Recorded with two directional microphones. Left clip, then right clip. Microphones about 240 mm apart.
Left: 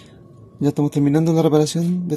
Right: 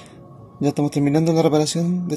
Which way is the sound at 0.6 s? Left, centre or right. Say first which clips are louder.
Left 1 dB; left.